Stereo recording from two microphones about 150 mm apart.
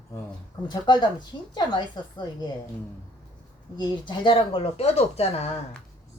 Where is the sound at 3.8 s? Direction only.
30° left (ahead or behind).